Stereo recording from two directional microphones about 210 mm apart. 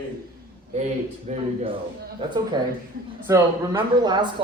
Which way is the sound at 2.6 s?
20° right (ahead or behind).